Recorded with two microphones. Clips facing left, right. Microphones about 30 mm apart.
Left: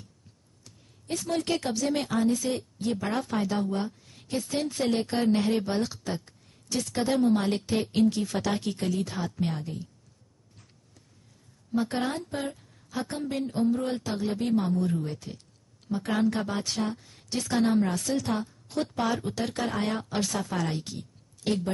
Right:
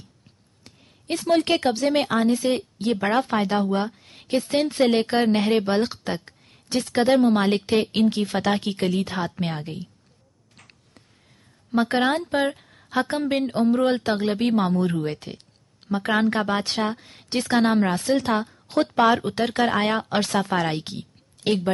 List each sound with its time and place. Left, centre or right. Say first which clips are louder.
0.7 s a woman's voice: right 6 dB; right
11.7 s a woman's voice: right 8 dB; right